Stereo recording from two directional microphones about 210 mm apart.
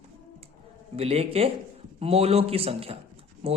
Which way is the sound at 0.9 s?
30° right (ahead or behind).